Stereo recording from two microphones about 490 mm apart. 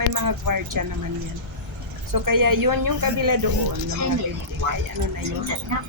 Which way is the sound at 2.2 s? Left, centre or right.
Right.